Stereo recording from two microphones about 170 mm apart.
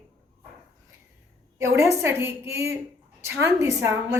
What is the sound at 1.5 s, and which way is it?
A woman's voice, 15° right (ahead or behind).